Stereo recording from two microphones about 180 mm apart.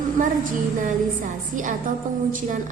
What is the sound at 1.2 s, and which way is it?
Speech, 45° right (ahead or behind).